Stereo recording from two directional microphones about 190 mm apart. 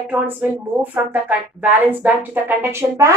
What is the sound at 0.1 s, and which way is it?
A woman's voice, 10° right (ahead or behind).